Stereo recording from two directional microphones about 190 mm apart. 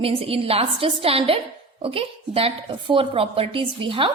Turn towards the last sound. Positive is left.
turn(degrees=-25)  # may be behind; listen again after turning